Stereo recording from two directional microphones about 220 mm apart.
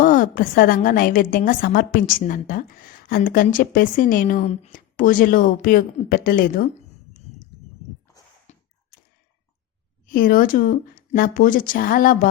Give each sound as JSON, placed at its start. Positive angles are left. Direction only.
{"t": 0.0, "sound": "a woman's voice", "side_deg": 40}
{"t": 8.5, "sound": "a sound", "side_deg": 30}
{"t": 10.1, "sound": "a woman's voice", "side_deg": 40}